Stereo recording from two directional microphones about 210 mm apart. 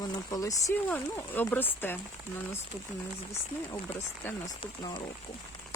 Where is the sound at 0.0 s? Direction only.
15° left (ahead or behind).